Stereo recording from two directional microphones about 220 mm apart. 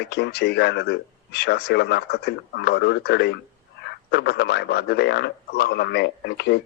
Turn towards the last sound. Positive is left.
turn(degrees=50)  # may be behind; listen again after turning